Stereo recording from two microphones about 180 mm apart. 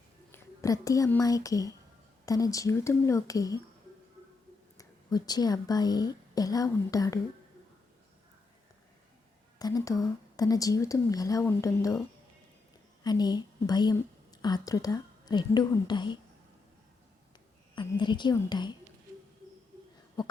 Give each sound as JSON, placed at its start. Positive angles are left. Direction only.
{"t": 0.3, "sound": "speech", "side_deg": 15}
{"t": 4.8, "sound": "a woman's voice", "side_deg": 20}
{"t": 9.6, "sound": "a woman's voice", "side_deg": 20}
{"t": 17.7, "sound": "speech", "side_deg": 25}